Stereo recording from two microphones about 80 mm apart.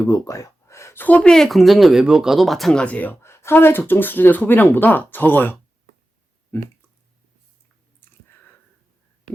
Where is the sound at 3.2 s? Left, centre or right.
Left.